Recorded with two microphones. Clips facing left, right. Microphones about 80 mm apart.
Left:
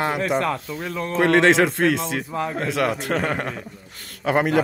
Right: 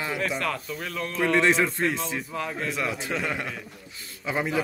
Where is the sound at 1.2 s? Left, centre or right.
Left.